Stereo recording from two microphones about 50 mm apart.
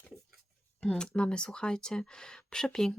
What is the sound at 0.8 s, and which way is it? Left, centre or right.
Speech, centre.